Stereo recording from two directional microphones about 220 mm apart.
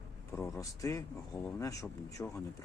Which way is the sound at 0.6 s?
15° left (ahead or behind).